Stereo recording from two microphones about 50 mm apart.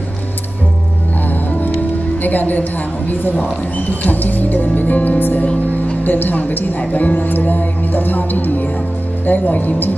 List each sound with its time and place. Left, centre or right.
2.2 s speech: left